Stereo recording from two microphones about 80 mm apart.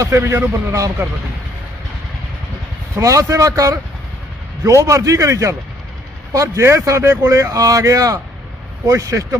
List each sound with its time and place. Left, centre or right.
0.0 s a man's voice: right
2.9 s a man's voice: right